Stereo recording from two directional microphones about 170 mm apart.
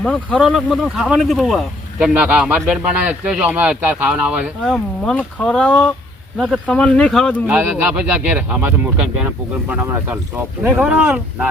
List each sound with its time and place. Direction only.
0.0 s speech: 5° left (ahead or behind)
7.4 s speech: 10° right (ahead or behind)